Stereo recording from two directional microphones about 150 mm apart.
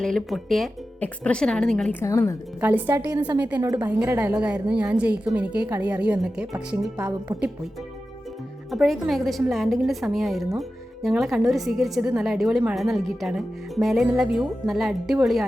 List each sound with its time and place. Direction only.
0.0 s speech: centre (ahead or behind)
2.0 s a woman's voice: 15° left (ahead or behind)
2.6 s a woman's voice: 15° right (ahead or behind)
8.7 s speech: centre (ahead or behind)